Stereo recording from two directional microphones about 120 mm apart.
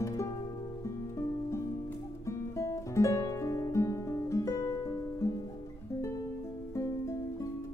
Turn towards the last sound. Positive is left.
turn(degrees=25)  # may be behind; listen again after turning